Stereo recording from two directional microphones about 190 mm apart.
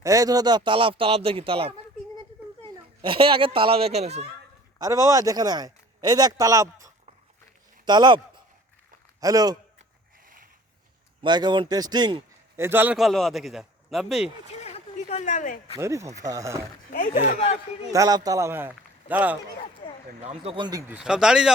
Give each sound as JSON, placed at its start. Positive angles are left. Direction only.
{"t": 0.0, "sound": "speech", "side_deg": -15}
{"t": 3.0, "sound": "speech", "side_deg": -25}
{"t": 4.8, "sound": "speech", "side_deg": -15}
{"t": 9.2, "sound": "speech", "side_deg": -20}
{"t": 10.2, "sound": "a sound", "side_deg": -45}
{"t": 11.2, "sound": "a man's voice", "side_deg": -25}
{"t": 15.1, "sound": "speech", "side_deg": 40}
{"t": 15.7, "sound": "a man's voice", "side_deg": -15}
{"t": 16.9, "sound": "speech", "side_deg": 40}
{"t": 17.9, "sound": "a man's voice", "side_deg": -20}
{"t": 20.4, "sound": "speech", "side_deg": -25}
{"t": 20.9, "sound": "speech", "side_deg": -5}